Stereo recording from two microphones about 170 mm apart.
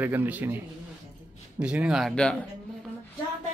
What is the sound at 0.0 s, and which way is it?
Speech, 10° right (ahead or behind).